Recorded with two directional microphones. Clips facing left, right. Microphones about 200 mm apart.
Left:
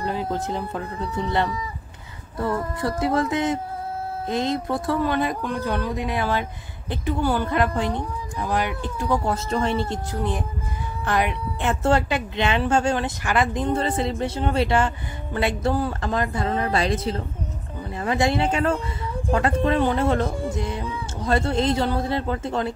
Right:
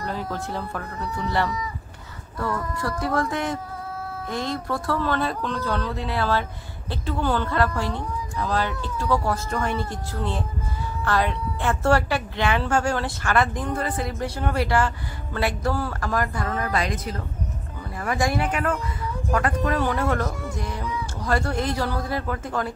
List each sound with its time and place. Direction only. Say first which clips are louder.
0.0 s a woman's voice: left 4 dB; 20° left (ahead or behind)